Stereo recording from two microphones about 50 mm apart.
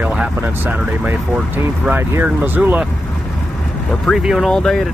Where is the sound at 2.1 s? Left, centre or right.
Right.